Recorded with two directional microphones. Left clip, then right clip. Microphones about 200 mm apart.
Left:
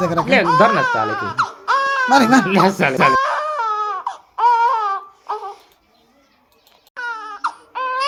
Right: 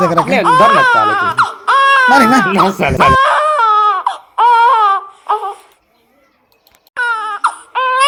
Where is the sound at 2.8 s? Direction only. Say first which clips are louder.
Right 4 dB; 5° right (ahead or behind).